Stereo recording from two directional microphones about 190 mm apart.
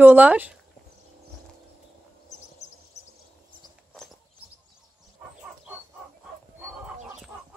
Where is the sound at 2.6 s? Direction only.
35° left (ahead or behind).